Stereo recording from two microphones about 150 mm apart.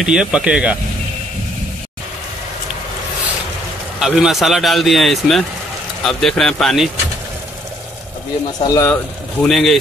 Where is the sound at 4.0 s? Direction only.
Centre (ahead or behind).